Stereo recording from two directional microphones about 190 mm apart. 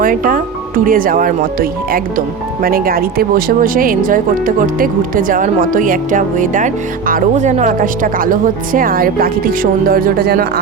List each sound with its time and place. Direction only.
0.0 s speech: 45° right (ahead or behind)